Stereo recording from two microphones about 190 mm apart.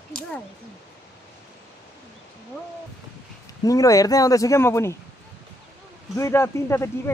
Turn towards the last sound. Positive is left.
turn(degrees=15)  # may be behind; listen again after turning